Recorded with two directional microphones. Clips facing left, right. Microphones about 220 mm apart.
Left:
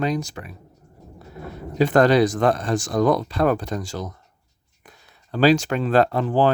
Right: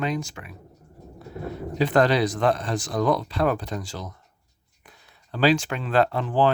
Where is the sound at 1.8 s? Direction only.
45° left (ahead or behind).